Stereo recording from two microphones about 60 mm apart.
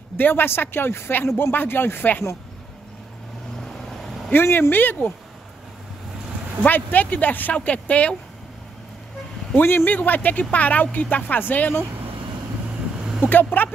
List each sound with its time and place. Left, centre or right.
0.2 s speech: left
3.5 s vehicle: centre
4.3 s speech: left
6.6 s speech: left
9.6 s speech: left
13.0 s vehicle: centre
13.3 s speech: left